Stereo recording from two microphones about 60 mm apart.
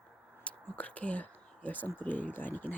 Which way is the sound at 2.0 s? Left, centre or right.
Left.